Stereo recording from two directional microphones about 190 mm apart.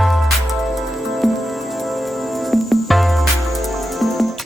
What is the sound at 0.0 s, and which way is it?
Music, centre (ahead or behind).